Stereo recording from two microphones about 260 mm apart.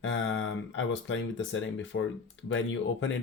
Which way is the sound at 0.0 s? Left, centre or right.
Left.